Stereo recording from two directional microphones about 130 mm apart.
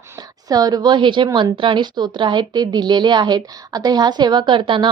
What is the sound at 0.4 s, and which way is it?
A woman's voice, 30° right (ahead or behind).